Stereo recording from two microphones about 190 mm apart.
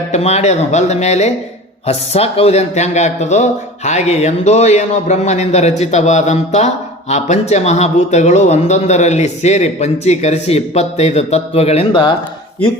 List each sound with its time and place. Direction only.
0.1 s speech: 35° left (ahead or behind)